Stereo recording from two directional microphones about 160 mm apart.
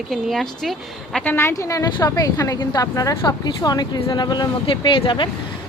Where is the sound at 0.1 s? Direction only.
Centre (ahead or behind).